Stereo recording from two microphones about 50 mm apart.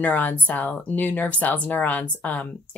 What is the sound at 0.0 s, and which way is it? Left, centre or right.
Speech, left.